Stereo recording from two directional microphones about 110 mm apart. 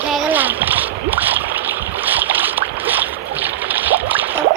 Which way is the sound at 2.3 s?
15° right (ahead or behind).